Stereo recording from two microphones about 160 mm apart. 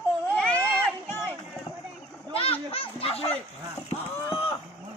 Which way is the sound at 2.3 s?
35° left (ahead or behind).